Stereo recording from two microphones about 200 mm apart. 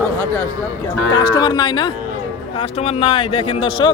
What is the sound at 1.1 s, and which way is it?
A man's voice, 20° left (ahead or behind).